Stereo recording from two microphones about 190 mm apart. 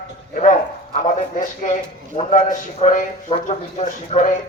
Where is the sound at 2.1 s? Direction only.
40° left (ahead or behind).